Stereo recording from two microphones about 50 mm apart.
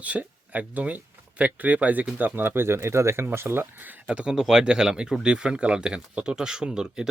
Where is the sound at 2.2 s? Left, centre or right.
Right.